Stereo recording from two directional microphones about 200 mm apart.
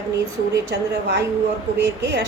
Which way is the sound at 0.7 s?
60° right (ahead or behind).